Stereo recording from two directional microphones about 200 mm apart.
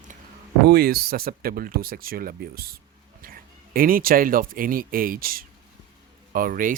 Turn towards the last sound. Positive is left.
turn(degrees=-45)  # may be behind; listen again after turning